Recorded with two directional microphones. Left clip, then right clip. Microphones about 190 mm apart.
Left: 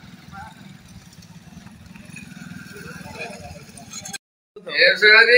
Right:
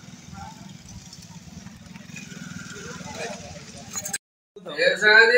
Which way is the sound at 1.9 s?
60° left (ahead or behind).